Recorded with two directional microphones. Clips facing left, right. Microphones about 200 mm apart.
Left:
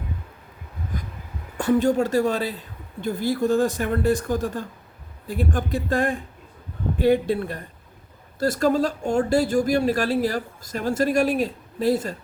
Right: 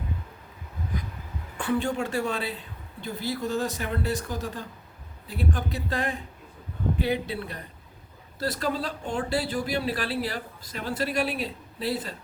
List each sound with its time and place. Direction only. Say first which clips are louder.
1.5 s speech: left 7 dB; 40° left (ahead or behind)